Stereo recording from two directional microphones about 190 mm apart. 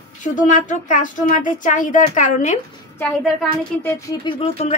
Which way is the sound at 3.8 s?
15° left (ahead or behind).